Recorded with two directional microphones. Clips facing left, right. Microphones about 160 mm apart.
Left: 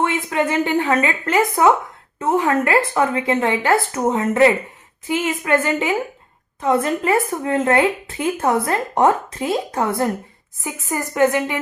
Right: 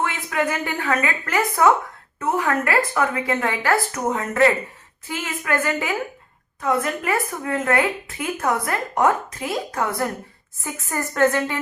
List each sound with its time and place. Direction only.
0.0 s a woman's voice: 25° left (ahead or behind)
10.6 s a woman's voice: 15° left (ahead or behind)